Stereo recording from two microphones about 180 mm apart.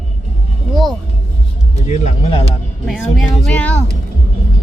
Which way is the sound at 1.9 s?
40° left (ahead or behind).